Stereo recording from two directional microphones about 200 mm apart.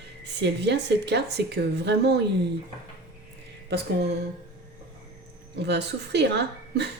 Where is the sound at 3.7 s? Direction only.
55° right (ahead or behind).